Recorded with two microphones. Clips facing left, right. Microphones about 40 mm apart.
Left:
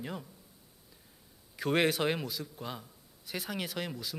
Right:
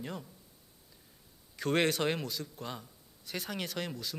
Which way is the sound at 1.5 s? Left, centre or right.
Centre.